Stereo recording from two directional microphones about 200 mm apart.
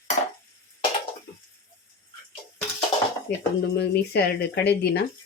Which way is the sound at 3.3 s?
50° left (ahead or behind).